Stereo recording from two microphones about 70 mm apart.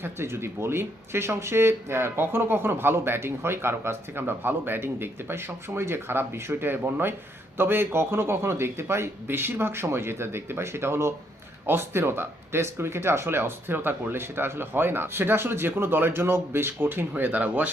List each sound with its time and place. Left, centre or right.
0.0 s speech: right